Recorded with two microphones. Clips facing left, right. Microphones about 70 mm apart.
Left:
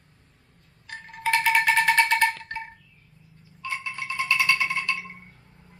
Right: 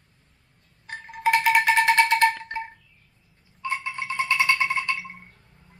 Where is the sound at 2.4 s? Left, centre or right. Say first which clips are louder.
Right 3 dB; centre.